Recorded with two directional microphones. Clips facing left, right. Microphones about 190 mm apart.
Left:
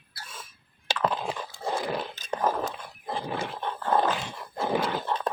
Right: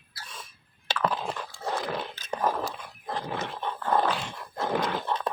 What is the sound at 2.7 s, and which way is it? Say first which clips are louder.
Dog: left 1 dB; 5° left (ahead or behind).